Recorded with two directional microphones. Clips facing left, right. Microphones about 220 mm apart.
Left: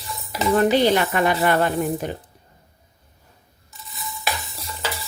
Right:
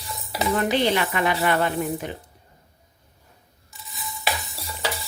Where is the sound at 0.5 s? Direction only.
45° left (ahead or behind).